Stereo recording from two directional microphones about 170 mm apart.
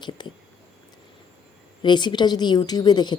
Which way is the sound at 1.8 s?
25° left (ahead or behind).